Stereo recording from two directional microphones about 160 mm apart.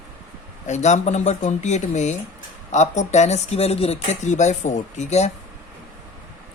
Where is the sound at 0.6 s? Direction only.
45° left (ahead or behind).